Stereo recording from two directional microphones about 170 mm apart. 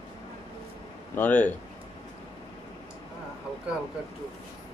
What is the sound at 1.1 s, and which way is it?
Speech, 10° left (ahead or behind).